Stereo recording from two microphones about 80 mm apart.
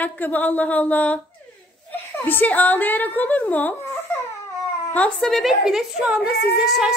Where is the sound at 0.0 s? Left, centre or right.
Left.